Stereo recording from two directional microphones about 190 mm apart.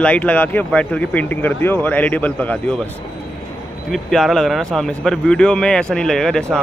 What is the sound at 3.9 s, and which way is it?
A man's voice, centre (ahead or behind).